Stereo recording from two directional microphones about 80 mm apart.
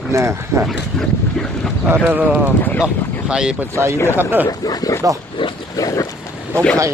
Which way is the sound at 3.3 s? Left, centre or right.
Centre.